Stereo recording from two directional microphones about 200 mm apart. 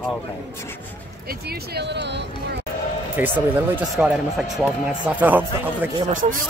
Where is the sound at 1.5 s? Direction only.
55° right (ahead or behind).